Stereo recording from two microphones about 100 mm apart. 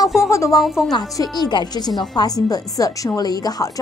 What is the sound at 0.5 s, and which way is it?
Speech, centre (ahead or behind).